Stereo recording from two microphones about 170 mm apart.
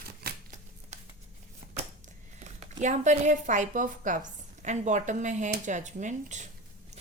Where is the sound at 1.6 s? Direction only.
50° right (ahead or behind).